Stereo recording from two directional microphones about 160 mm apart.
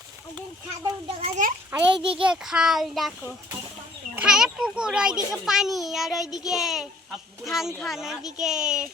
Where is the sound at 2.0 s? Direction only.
35° right (ahead or behind).